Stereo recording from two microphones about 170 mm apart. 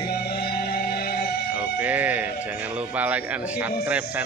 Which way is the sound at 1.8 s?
10° right (ahead or behind).